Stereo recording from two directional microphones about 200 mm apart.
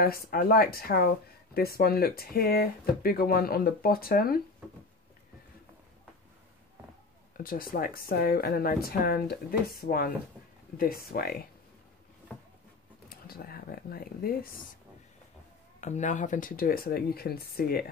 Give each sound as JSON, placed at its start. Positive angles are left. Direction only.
{"t": 0.0, "sound": "speech", "side_deg": 50}
{"t": 7.3, "sound": "speech", "side_deg": 45}
{"t": 13.1, "sound": "speech", "side_deg": 50}
{"t": 15.8, "sound": "speech", "side_deg": 35}